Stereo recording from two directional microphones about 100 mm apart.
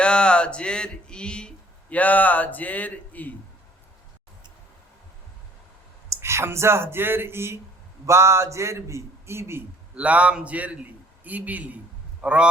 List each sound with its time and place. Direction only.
0.0 s speech: 10° left (ahead or behind)
6.1 s a man's voice: 25° right (ahead or behind)
9.9 s a man's voice: 15° right (ahead or behind)